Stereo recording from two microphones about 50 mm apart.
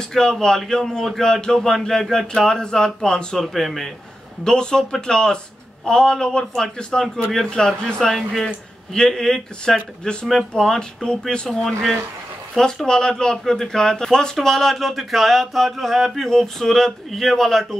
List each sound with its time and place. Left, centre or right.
0.1 s speech: centre
7.5 s speech: centre
8.9 s speech: centre